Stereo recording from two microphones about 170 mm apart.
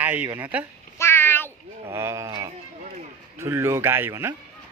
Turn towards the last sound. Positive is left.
turn(degrees=-15)  # may be behind; listen again after turning